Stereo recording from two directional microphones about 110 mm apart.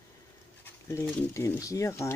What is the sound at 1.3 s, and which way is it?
Speech, 25° left (ahead or behind).